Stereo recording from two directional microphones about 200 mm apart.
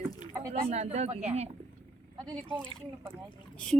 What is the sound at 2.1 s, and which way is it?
Speech, 20° right (ahead or behind).